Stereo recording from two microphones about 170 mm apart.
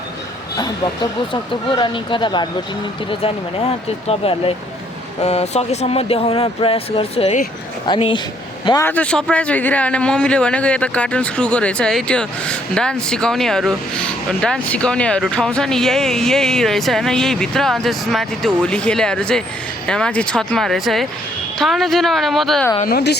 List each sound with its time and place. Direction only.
1.3 s speech: 30° left (ahead or behind)
4.1 s speech: 35° left (ahead or behind)
8.9 s a man's voice: 5° left (ahead or behind)
22.9 s a woman's voice: 70° left (ahead or behind)